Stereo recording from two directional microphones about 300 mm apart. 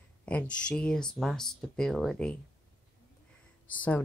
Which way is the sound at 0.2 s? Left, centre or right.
Centre.